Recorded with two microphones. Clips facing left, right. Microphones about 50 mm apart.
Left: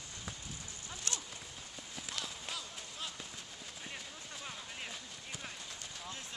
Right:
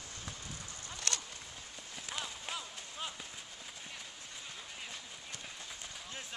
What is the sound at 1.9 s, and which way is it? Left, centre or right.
Run, centre.